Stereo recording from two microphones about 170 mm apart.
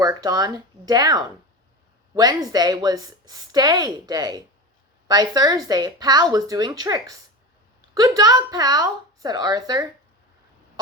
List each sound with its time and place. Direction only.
0.0 s a woman's voice: 20° right (ahead or behind)